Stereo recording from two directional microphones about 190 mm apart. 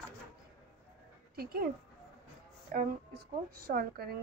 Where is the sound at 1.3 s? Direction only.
50° right (ahead or behind).